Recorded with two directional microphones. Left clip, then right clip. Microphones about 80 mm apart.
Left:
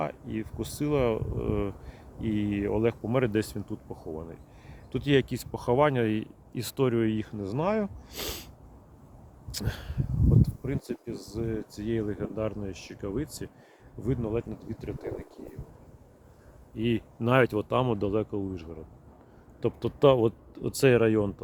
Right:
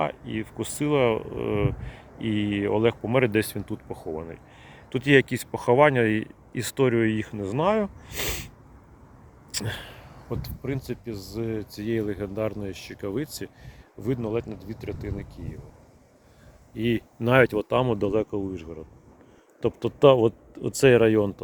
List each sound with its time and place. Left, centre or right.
0.0 s speech: centre
7.2 s speech: centre
9.5 s speech: centre
10.2 s speech: right
14.0 s speech: right
16.7 s speech: right
17.5 s speech: centre; by 18.8 s right
19.6 s speech: centre
21.0 s speech: right